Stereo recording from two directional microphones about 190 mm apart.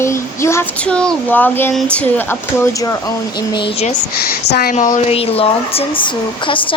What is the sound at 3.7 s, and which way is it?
Speech, 35° left (ahead or behind).